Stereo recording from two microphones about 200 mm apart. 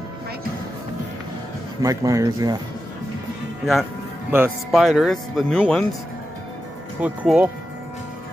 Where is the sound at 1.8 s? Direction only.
15° right (ahead or behind).